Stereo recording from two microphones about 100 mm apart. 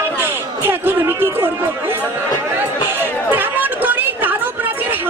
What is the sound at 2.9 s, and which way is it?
Chatter, 20° right (ahead or behind).